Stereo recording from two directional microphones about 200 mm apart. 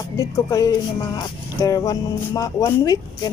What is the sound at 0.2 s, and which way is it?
A woman's voice, 15° left (ahead or behind).